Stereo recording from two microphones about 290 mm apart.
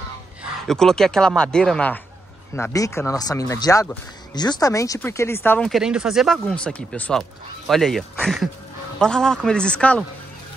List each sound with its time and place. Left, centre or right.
0.4 s speech: centre